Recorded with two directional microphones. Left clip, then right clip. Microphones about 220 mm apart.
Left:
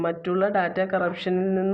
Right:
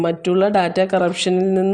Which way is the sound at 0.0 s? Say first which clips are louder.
Right 7 dB; 50° right (ahead or behind).